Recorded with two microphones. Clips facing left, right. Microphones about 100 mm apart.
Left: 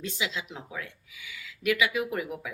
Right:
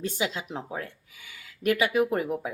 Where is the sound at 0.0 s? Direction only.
45° right (ahead or behind).